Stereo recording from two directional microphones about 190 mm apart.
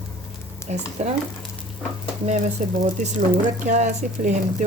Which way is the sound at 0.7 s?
40° right (ahead or behind).